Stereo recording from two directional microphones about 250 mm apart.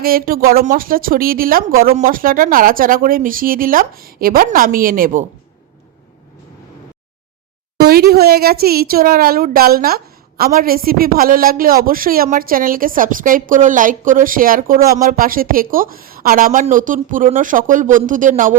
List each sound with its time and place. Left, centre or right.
0.0 s speech: right
7.8 s speech: right